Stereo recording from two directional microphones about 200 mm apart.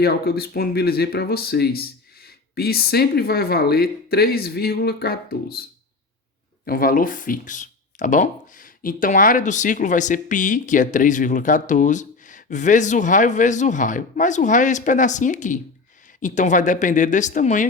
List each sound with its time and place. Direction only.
0.0 s speech: 50° left (ahead or behind)
6.7 s speech: 45° left (ahead or behind)